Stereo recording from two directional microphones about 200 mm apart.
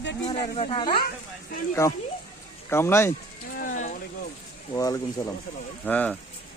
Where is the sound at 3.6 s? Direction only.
40° left (ahead or behind).